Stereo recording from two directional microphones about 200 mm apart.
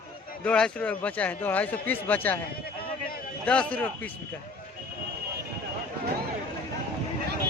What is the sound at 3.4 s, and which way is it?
Speech, 5° left (ahead or behind).